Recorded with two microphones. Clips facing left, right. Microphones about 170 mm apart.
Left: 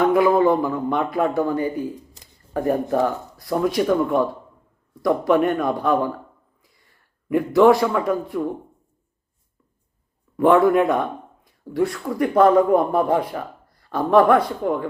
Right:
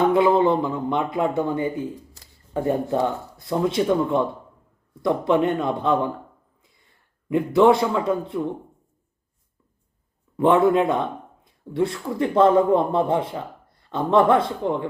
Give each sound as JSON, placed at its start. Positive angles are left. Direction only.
{"t": 0.0, "sound": "speech", "side_deg": -25}
{"t": 2.1, "sound": "a sound", "side_deg": 20}
{"t": 2.5, "sound": "speech", "side_deg": -20}
{"t": 7.3, "sound": "speech", "side_deg": -20}
{"t": 10.3, "sound": "a man's voice", "side_deg": -25}